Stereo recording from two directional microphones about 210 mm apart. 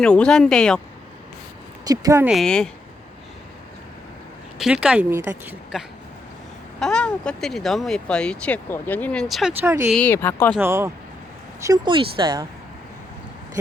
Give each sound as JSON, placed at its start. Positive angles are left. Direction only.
{"t": 0.0, "sound": "speech", "side_deg": 5}
{"t": 1.9, "sound": "speech", "side_deg": -15}
{"t": 2.2, "sound": "speech", "side_deg": 0}
{"t": 4.5, "sound": "speech", "side_deg": -5}
{"t": 6.7, "sound": "speech", "side_deg": 5}
{"t": 9.6, "sound": "speech", "side_deg": -10}
{"t": 9.9, "sound": "speech", "side_deg": 10}
{"t": 10.6, "sound": "speech", "side_deg": -10}